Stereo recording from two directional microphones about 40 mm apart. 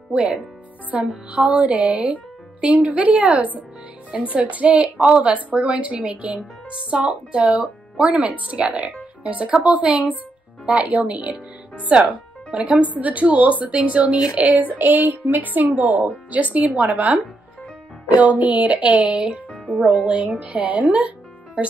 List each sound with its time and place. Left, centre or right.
0.1 s a woman's voice: right
14.8 s a woman's voice: right
19.5 s music: left
20.1 s speech: right